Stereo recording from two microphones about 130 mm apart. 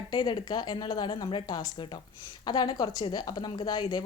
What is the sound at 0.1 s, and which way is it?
A woman's voice, 35° left (ahead or behind).